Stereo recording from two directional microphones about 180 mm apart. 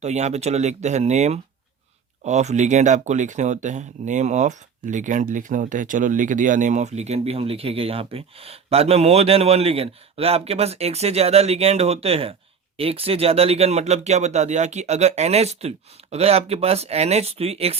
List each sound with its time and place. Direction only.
0.0 s speech: 40° right (ahead or behind)